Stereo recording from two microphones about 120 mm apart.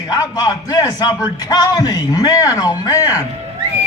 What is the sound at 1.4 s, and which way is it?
A man's voice, 35° left (ahead or behind).